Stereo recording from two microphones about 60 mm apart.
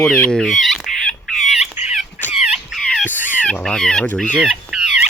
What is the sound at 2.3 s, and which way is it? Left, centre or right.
Dog, centre.